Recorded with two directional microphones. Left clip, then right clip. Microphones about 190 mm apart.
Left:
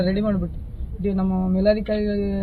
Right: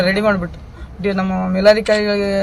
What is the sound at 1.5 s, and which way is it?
Speech, 35° right (ahead or behind).